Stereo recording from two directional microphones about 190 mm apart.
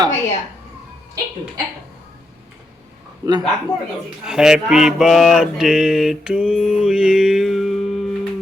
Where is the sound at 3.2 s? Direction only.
15° right (ahead or behind).